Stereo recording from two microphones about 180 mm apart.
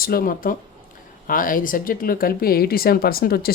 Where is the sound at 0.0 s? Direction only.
55° left (ahead or behind).